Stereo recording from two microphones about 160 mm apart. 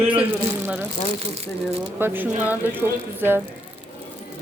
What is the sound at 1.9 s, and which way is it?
A woman's voice, 15° right (ahead or behind).